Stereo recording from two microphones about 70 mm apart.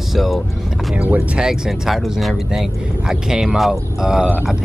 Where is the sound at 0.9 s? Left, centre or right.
Centre.